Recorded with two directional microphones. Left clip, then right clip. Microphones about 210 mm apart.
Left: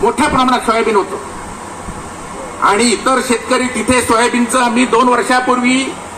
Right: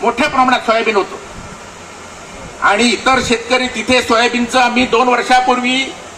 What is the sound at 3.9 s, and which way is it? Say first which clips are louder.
A man's voice: even; 20° right (ahead or behind).